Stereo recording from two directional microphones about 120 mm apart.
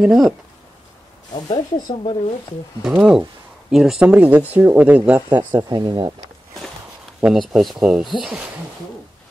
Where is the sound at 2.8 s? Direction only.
5° right (ahead or behind).